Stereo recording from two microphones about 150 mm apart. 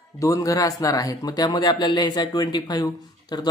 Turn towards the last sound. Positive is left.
turn(degrees=30)  # may be behind; listen again after turning